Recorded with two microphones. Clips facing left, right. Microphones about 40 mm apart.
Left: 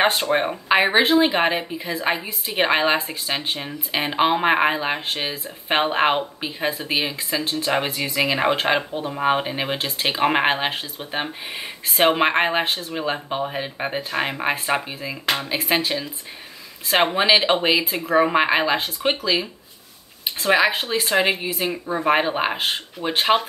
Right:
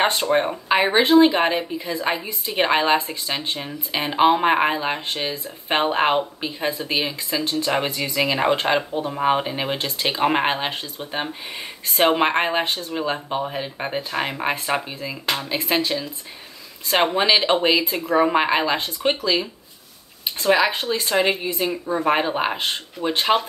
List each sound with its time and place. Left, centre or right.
0.0 s speech: centre